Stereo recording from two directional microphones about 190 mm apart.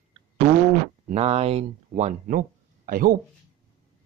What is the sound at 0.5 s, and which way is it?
Fart, 45° right (ahead or behind).